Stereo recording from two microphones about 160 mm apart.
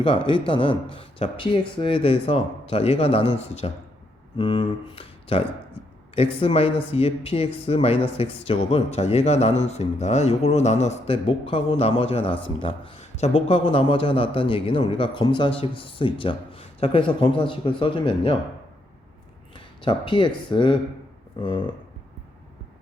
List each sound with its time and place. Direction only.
0.0 s speech: 30° left (ahead or behind)
19.8 s speech: 30° left (ahead or behind)